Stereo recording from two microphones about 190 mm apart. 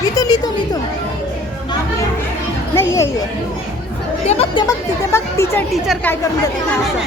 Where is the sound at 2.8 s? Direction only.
15° left (ahead or behind).